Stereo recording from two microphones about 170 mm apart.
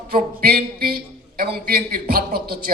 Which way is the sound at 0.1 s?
65° right (ahead or behind).